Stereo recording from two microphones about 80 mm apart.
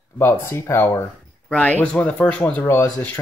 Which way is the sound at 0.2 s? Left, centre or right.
Left.